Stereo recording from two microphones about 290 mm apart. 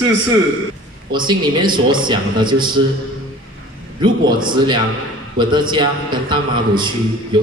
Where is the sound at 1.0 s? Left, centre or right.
Centre.